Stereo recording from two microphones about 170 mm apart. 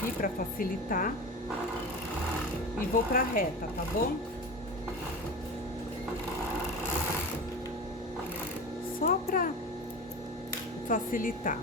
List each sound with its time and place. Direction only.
0.2 s speech: 55° left (ahead or behind)
2.9 s speech: 55° left (ahead or behind)
9.0 s speech: 55° left (ahead or behind)
10.8 s speech: 55° left (ahead or behind)